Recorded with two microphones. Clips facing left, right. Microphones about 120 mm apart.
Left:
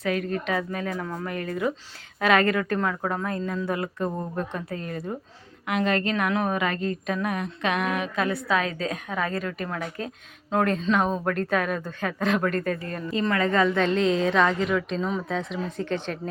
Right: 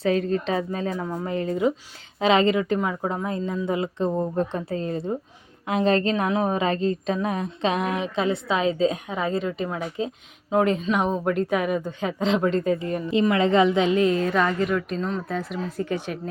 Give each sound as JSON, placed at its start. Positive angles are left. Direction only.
{"t": 0.0, "sound": "a woman's voice", "side_deg": -30}